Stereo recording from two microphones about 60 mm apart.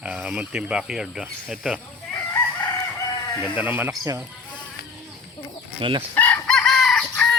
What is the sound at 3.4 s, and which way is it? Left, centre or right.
Speech, right.